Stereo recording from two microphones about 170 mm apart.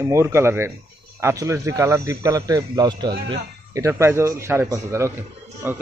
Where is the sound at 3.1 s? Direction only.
70° right (ahead or behind).